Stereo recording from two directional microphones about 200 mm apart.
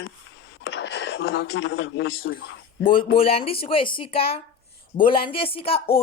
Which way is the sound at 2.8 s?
25° left (ahead or behind).